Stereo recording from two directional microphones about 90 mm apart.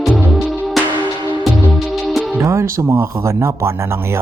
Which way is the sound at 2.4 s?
35° right (ahead or behind).